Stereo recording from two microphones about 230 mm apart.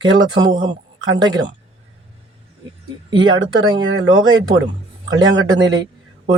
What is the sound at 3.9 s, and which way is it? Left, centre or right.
A man's voice, right.